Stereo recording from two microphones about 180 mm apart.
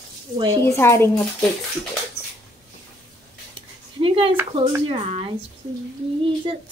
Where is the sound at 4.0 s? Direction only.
30° right (ahead or behind).